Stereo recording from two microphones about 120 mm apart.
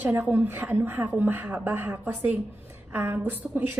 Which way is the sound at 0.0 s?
20° right (ahead or behind).